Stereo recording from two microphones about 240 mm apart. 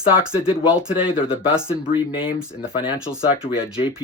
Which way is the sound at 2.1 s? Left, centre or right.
Left.